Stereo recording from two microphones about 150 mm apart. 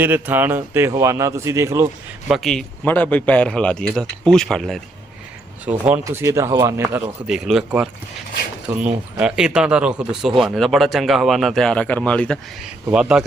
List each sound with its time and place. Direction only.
0.0 s speech: 15° right (ahead or behind)
2.3 s speech: 5° left (ahead or behind)
5.6 s speech: 10° right (ahead or behind)
6.9 s speech: 5° right (ahead or behind)
12.6 s speech: 5° right (ahead or behind)